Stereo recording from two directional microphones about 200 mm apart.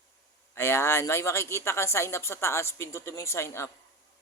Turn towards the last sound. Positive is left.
turn(degrees=15)  # may be behind; listen again after turning